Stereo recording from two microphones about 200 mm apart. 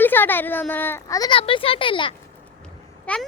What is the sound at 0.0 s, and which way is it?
A woman's voice, 10° left (ahead or behind).